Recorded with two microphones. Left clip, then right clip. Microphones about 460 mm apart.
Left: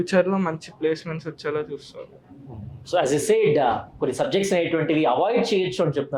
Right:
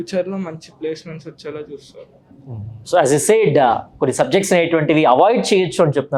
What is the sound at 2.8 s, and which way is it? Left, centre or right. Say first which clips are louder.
Speech: right 7 dB; right.